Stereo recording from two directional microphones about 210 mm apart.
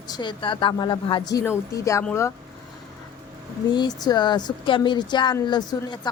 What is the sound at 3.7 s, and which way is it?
Speech, 20° left (ahead or behind).